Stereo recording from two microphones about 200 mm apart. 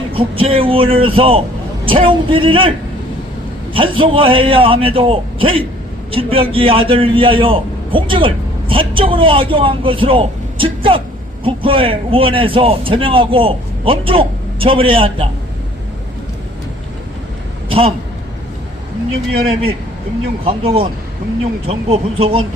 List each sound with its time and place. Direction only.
0.1 s a man's voice: 25° right (ahead or behind)
17.7 s a sound: 30° right (ahead or behind)
20.4 s a man's voice: 30° right (ahead or behind)